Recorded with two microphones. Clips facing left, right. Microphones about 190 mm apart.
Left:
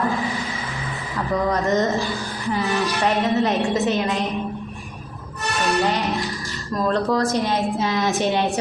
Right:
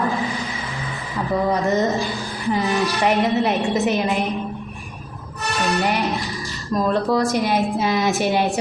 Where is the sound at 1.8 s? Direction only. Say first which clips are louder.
Right 1 dB; 20° right (ahead or behind).